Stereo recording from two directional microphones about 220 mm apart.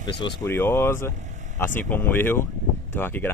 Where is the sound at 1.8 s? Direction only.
10° left (ahead or behind).